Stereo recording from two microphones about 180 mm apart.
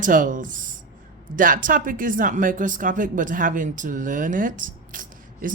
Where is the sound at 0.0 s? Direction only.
45° right (ahead or behind).